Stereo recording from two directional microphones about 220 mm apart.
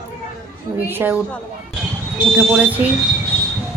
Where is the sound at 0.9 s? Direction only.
10° right (ahead or behind).